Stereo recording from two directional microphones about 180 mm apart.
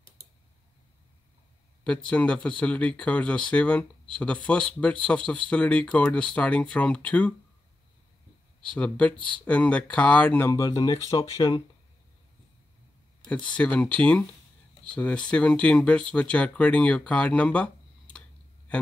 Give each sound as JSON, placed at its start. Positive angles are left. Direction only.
{"t": 1.9, "sound": "speech", "side_deg": 5}
{"t": 8.7, "sound": "speech", "side_deg": 5}
{"t": 13.3, "sound": "speech", "side_deg": 5}